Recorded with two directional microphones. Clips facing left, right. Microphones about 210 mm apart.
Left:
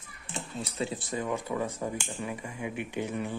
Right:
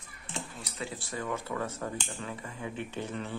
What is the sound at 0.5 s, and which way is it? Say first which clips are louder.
Speech: left 6 dB; 25° left (ahead or behind).